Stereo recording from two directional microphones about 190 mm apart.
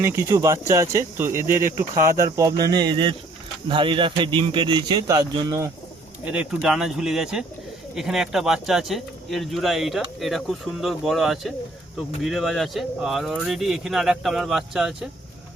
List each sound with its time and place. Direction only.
0.0 s a man's voice: 15° right (ahead or behind)
6.2 s speech: 5° right (ahead or behind)